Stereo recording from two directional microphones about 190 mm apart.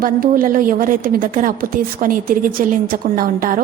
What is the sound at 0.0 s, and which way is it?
A woman's voice, 50° right (ahead or behind).